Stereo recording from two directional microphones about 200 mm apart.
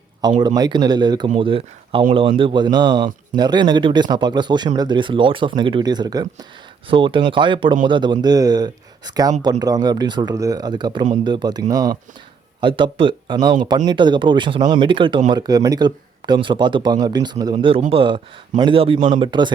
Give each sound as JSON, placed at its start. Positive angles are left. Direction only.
{"t": 0.2, "sound": "speech", "side_deg": -20}